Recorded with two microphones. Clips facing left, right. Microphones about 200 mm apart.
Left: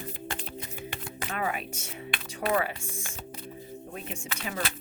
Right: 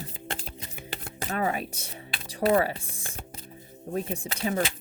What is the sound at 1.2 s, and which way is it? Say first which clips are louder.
Speech: right 4 dB; 35° right (ahead or behind).